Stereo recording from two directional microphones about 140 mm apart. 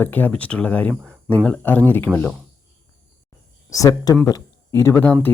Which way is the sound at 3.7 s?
25° left (ahead or behind).